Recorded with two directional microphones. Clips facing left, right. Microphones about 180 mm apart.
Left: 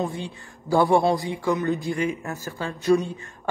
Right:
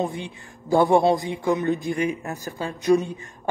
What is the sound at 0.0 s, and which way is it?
Speech, 15° right (ahead or behind).